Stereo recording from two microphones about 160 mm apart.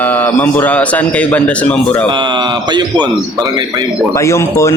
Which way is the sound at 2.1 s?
30° right (ahead or behind).